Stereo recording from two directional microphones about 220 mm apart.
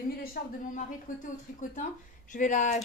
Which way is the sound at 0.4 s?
40° left (ahead or behind).